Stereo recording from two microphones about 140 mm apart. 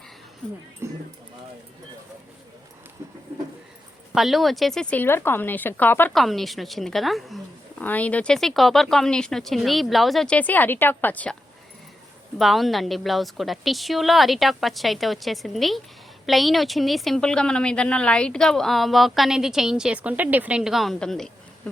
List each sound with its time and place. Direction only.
0.4 s a woman's voice: 5° left (ahead or behind)
0.8 s speech: 20° right (ahead or behind)
3.0 s a sound: 20° right (ahead or behind)
4.1 s a woman's voice: centre (ahead or behind)
6.1 s a woman's voice: centre (ahead or behind)
7.8 s a woman's voice: 10° left (ahead or behind)
12.4 s a woman's voice: centre (ahead or behind)